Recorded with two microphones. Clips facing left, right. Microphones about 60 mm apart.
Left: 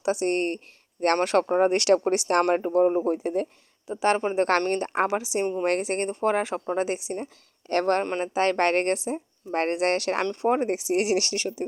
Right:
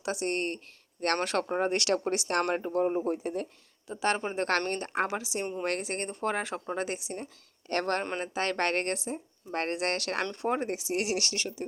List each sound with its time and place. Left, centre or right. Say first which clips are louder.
0.0 s speech: left 7 dB; centre; by 3.5 s left
3.8 s speech: left 6 dB; left
6.1 s speech: left 6 dB; centre